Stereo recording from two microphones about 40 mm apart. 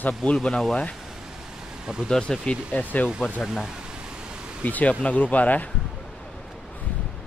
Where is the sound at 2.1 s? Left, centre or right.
Centre.